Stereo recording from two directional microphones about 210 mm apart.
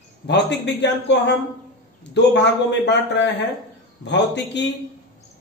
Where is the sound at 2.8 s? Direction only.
55° left (ahead or behind).